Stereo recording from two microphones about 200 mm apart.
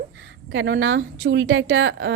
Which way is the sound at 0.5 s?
65° right (ahead or behind).